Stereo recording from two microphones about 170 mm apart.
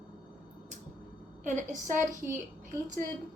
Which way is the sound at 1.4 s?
45° right (ahead or behind).